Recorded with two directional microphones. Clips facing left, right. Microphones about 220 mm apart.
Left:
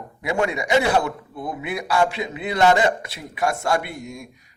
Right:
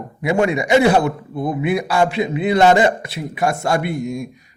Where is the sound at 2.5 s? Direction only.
30° right (ahead or behind).